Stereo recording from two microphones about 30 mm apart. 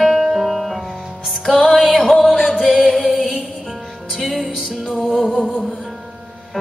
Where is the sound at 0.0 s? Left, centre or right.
Centre.